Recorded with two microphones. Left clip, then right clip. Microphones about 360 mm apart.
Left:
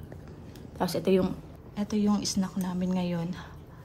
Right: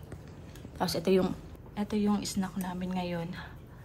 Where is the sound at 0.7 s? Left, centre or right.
Centre.